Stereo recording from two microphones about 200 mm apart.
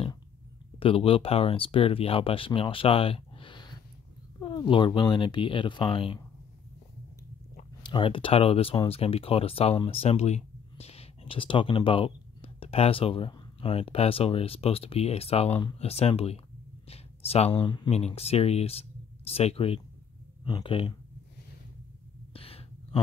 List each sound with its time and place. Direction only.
0.7 s speech: 25° left (ahead or behind)
7.8 s speech: 25° left (ahead or behind)
22.3 s a sound: 30° left (ahead or behind)